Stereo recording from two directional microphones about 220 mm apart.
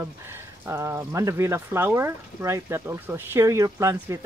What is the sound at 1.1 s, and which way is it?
Speech, 15° right (ahead or behind).